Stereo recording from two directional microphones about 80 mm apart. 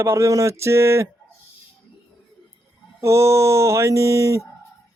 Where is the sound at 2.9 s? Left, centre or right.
Right.